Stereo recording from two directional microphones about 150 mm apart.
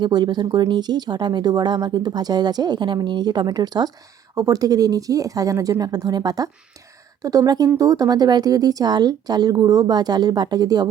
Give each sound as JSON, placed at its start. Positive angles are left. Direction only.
{"t": 0.0, "sound": "speech", "side_deg": -30}